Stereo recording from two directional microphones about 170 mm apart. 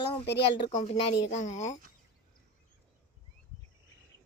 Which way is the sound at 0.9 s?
35° left (ahead or behind).